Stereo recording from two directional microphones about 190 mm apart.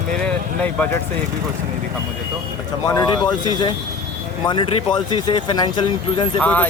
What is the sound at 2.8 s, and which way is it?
Speech, 20° left (ahead or behind).